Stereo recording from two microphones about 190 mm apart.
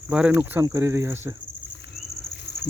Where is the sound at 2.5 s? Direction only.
60° left (ahead or behind).